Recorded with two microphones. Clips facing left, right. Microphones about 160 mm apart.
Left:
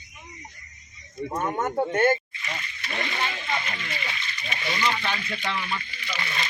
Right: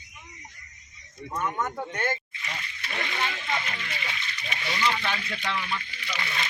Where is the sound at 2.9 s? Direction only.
15° left (ahead or behind).